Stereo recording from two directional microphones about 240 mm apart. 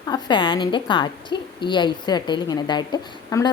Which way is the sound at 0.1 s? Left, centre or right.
Centre.